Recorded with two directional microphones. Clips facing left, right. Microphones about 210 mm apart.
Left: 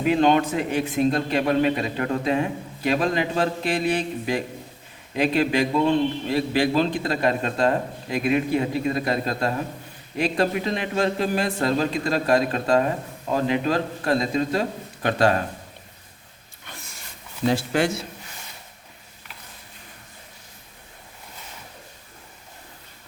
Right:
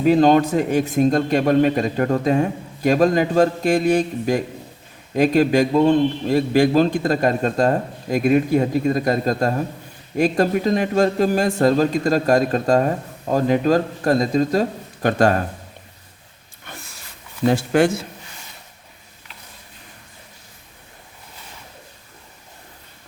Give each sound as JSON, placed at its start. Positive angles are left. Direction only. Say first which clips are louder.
{"t": 0.0, "sound": "a man's voice", "louder": "right 5 dB", "side_deg": -40}
{"t": 17.4, "sound": "a man's voice", "louder": "right 5 dB", "side_deg": -50}